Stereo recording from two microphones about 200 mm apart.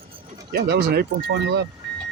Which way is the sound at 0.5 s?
55° right (ahead or behind).